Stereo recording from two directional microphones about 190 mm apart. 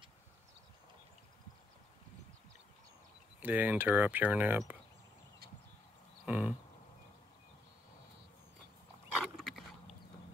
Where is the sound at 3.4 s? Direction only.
10° right (ahead or behind).